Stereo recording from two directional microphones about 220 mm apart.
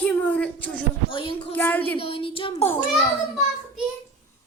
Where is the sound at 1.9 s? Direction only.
25° left (ahead or behind).